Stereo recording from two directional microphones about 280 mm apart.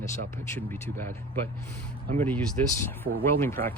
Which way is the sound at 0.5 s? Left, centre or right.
Centre.